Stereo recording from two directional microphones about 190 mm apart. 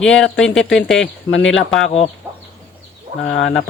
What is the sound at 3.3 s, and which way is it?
Speech, 80° left.